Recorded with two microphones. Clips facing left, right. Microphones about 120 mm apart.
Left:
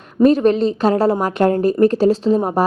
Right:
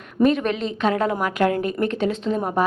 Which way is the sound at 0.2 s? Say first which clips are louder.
Left 7 dB; 35° left (ahead or behind).